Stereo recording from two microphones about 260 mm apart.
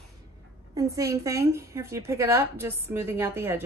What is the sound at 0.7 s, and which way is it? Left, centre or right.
A woman's voice, centre.